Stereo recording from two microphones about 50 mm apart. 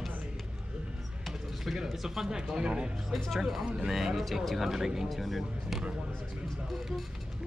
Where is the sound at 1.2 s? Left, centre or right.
Centre.